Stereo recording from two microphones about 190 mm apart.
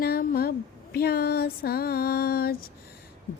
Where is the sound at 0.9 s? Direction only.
55° left (ahead or behind).